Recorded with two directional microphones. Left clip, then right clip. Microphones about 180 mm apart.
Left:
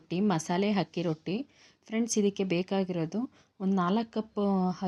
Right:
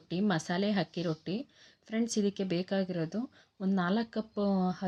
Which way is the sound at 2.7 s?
5° left (ahead or behind).